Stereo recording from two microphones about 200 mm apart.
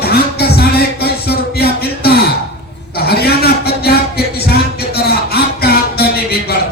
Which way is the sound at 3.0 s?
50° left (ahead or behind).